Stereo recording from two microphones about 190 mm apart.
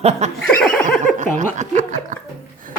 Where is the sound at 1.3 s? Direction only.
40° right (ahead or behind).